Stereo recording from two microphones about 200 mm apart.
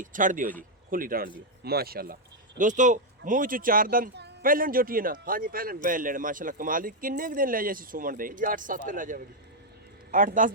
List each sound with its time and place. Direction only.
0.0 s a man's voice: 40° right (ahead or behind)